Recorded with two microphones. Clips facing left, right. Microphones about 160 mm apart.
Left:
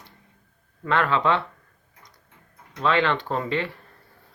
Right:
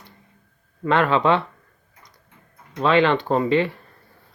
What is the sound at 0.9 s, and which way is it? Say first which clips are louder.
Speech: right 4 dB; 20° right (ahead or behind).